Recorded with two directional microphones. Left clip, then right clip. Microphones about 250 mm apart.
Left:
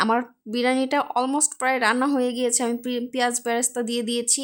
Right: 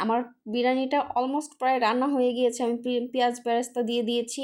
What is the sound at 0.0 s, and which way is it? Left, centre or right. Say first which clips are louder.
Speech: left 4 dB; left.